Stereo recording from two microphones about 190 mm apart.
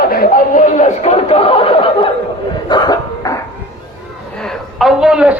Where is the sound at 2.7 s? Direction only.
20° left (ahead or behind).